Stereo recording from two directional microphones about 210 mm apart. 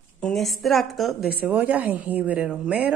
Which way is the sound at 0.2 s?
Centre (ahead or behind).